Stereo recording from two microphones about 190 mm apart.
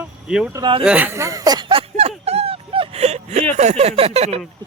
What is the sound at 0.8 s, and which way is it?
Speech, 10° right (ahead or behind).